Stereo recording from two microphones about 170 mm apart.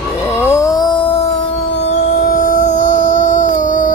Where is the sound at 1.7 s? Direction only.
90° left.